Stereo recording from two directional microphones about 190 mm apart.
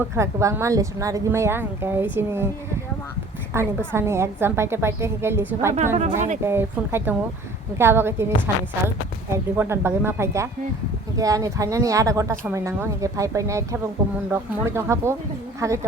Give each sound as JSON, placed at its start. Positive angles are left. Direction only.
{"t": 0.0, "sound": "speech", "side_deg": -15}
{"t": 3.5, "sound": "speech", "side_deg": -15}
{"t": 5.7, "sound": "a woman's voice", "side_deg": -40}
{"t": 6.4, "sound": "speech", "side_deg": -10}